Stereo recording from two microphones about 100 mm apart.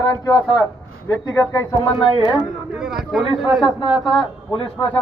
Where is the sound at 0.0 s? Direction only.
35° left (ahead or behind).